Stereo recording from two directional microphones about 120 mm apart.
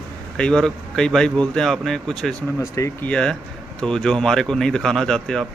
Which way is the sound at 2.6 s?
25° left (ahead or behind).